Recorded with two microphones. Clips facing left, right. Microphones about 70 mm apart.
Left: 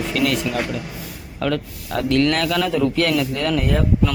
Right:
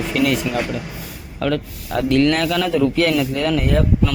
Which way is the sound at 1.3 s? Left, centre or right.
Centre.